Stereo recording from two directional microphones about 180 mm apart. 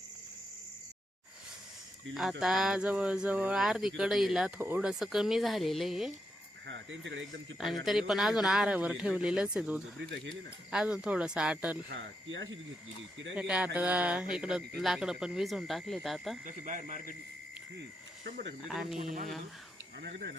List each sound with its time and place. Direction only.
2.4 s speech: centre (ahead or behind)
6.7 s speech: 85° right
7.9 s speech: centre (ahead or behind)
10.0 s speech: 90° right
10.7 s speech: 5° right (ahead or behind)
11.9 s speech: 90° right
13.3 s speech: 5° right (ahead or behind)
16.5 s speech: 45° right (ahead or behind)
18.3 s speech: 60° right (ahead or behind)
18.7 s speech: centre (ahead or behind)
18.9 s speech: 50° right (ahead or behind)